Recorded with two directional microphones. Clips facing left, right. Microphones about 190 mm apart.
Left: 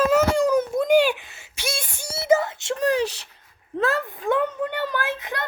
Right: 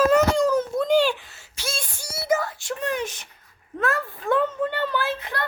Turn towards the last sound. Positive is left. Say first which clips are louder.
# right 1 dB
turn(degrees=15)  # may be behind; listen again after turning